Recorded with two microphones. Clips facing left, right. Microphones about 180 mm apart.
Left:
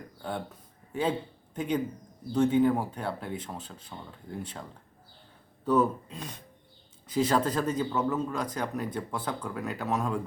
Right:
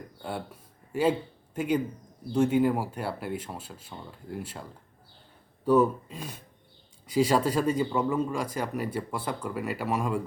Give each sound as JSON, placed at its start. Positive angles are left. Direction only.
{"t": 0.2, "sound": "a sound", "side_deg": -10}
{"t": 1.5, "sound": "a man's voice", "side_deg": -10}
{"t": 5.6, "sound": "a man's voice", "side_deg": -10}